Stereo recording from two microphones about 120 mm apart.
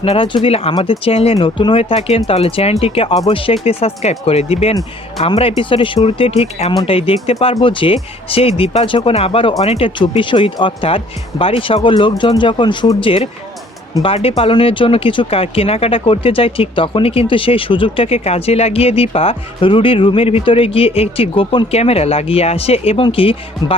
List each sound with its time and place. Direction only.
0.0 s speech: 50° left (ahead or behind)